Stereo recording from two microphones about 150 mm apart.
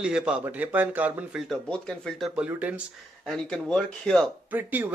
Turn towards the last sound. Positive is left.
turn(degrees=-10)  # may be behind; listen again after turning